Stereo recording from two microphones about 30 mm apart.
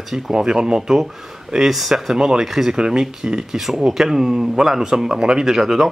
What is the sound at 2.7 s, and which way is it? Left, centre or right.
Speech, right.